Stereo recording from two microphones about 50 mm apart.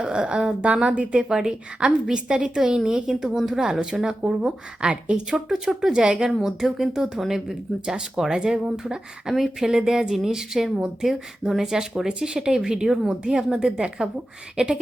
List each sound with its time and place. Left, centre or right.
0.0 s a woman's voice: centre
5.5 s speech: centre